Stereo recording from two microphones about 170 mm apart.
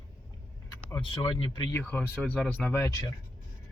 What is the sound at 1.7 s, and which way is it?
Speech, 10° left (ahead or behind).